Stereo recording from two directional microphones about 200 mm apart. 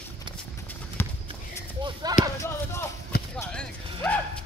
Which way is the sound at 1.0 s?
10° left (ahead or behind).